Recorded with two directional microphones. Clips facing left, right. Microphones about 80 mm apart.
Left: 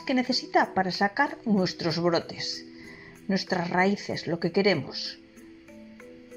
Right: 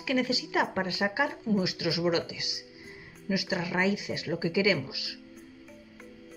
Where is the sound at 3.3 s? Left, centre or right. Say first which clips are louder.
Left 3 dB; left.